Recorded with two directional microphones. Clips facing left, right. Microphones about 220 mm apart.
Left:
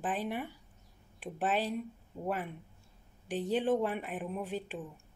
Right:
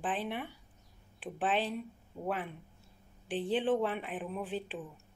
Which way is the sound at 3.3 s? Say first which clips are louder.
Even; 40° left (ahead or behind).